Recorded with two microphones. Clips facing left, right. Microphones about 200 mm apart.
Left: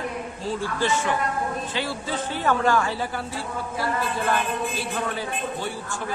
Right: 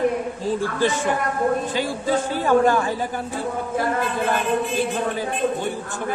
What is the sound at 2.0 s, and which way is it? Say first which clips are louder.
Speech: right 7 dB; 45° right (ahead or behind).